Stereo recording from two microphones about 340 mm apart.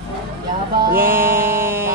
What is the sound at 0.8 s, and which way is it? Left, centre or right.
Mantra, right.